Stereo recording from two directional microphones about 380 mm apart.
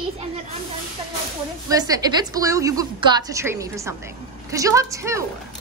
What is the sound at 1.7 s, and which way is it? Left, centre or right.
A woman's voice, centre.